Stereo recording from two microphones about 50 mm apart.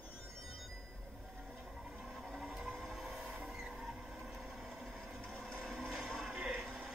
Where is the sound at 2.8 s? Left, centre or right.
Centre.